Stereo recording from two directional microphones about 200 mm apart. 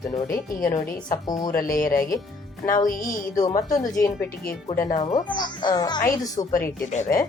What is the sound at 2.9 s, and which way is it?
Speech, 45° left (ahead or behind).